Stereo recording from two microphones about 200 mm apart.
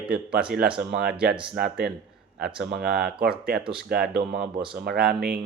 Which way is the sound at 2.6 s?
50° right (ahead or behind).